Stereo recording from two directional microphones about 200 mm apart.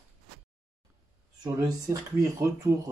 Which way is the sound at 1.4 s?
15° right (ahead or behind).